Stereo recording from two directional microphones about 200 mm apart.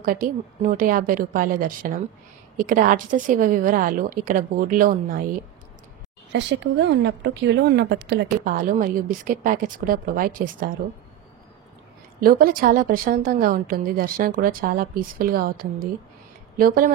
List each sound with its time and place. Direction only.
0.0 s a woman's voice: 45° right (ahead or behind)
6.3 s speech: 65° right (ahead or behind)
8.5 s a woman's voice: 45° right (ahead or behind)
12.2 s a woman's voice: 45° right (ahead or behind)